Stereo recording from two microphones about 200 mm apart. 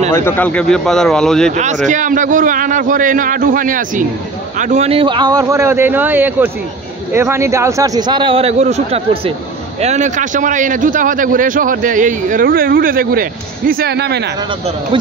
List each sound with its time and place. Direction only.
0.1 s a man's voice: 10° left (ahead or behind)
1.9 s a man's voice: 40° right (ahead or behind)